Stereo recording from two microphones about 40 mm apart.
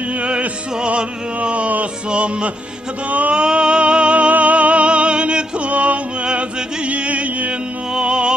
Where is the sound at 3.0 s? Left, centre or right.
Right.